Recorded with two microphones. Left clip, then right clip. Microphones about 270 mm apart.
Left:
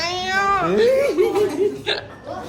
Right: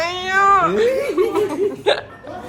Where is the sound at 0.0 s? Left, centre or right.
Centre.